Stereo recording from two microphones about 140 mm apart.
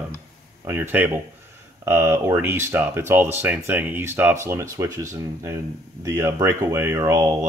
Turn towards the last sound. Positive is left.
turn(degrees=-20)  # may be behind; listen again after turning